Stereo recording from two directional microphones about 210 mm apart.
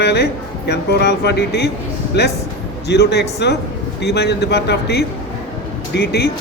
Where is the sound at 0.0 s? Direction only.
50° left (ahead or behind).